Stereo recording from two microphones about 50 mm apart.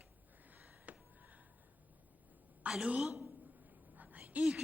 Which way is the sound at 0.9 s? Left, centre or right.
Right.